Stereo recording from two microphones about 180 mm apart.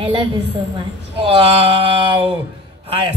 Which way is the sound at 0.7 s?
25° right (ahead or behind).